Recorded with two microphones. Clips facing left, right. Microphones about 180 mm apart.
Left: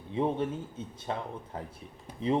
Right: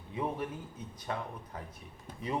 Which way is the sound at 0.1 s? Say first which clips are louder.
Left 6 dB; 25° left (ahead or behind).